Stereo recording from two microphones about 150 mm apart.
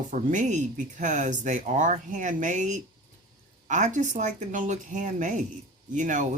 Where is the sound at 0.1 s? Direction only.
55° right (ahead or behind).